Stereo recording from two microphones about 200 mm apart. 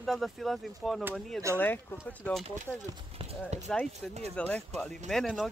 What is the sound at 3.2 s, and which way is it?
Speech, 35° right (ahead or behind).